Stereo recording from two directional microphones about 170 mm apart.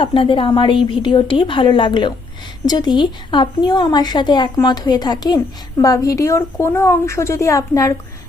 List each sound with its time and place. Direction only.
0.0 s speech: 30° left (ahead or behind)